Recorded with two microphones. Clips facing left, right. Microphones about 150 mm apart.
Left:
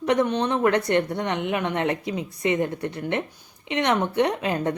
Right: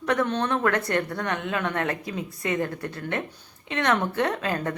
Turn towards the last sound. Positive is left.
turn(degrees=20)  # may be behind; listen again after turning